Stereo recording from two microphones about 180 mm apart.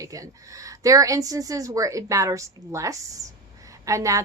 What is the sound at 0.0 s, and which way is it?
A woman's voice, 20° right (ahead or behind).